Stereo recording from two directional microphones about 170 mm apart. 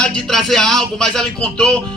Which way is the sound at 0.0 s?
Centre (ahead or behind).